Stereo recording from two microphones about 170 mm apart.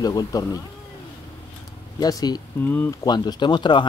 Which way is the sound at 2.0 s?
20° left (ahead or behind).